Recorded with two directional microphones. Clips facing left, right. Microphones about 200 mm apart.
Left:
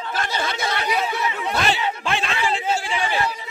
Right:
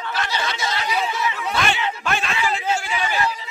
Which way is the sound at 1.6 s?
30° left (ahead or behind).